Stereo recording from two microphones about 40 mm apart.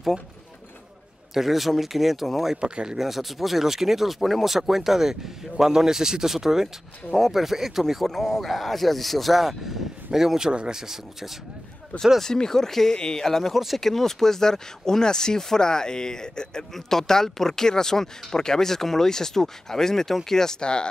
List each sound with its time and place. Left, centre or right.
1.3 s speech: centre
2.5 s speech: centre
3.0 s speech: centre
12.2 s speech: centre